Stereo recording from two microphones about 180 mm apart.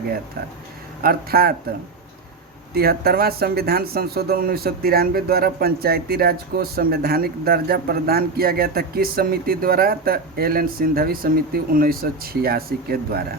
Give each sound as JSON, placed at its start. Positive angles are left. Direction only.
{"t": 1.0, "sound": "speech", "side_deg": -55}
{"t": 2.7, "sound": "speech", "side_deg": -60}